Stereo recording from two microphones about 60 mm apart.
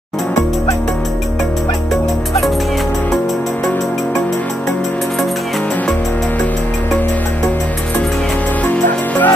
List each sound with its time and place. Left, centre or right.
8.6 s music: left